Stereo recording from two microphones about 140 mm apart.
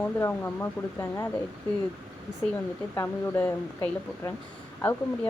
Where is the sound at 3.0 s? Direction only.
15° left (ahead or behind).